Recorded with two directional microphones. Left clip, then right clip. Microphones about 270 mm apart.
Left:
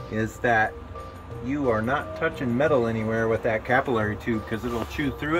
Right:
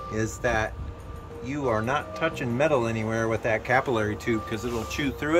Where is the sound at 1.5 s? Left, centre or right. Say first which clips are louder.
Left 2 dB; centre.